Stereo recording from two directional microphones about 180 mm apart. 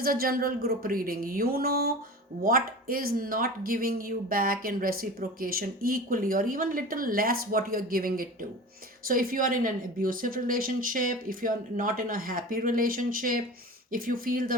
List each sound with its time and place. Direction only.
0.0 s speech: 55° right (ahead or behind)